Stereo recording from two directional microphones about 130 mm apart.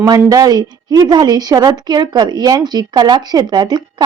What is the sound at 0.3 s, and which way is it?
A woman's voice, 30° right (ahead or behind).